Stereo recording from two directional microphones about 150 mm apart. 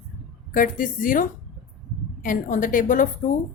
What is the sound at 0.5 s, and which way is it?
A woman's voice, 65° left (ahead or behind).